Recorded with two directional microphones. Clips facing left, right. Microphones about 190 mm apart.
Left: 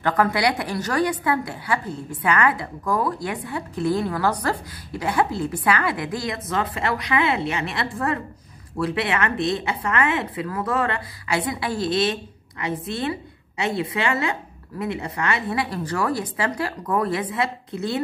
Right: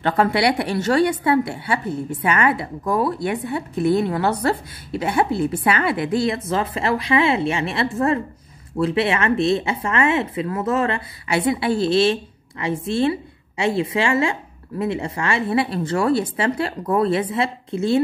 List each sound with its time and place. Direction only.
0.0 s a woman's voice: 25° right (ahead or behind)